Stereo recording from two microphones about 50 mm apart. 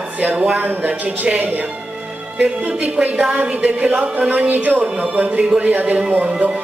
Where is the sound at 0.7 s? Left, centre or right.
Right.